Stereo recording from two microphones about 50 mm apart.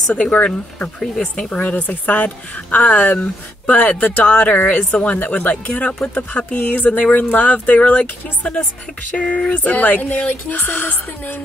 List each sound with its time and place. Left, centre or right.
0.1 s speech: left
1.6 s speech: left